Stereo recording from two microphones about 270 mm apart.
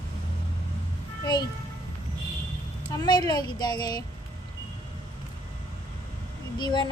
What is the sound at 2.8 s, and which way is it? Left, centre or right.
A woman's voice, centre.